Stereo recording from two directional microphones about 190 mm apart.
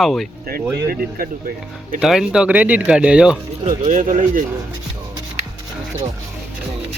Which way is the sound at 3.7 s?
40° right (ahead or behind).